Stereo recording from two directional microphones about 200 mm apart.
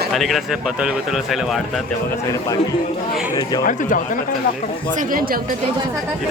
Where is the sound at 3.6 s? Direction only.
40° left (ahead or behind).